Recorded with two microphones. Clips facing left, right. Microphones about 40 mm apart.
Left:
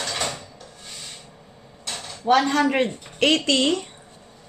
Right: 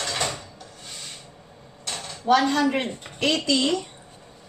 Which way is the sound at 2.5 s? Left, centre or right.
Left.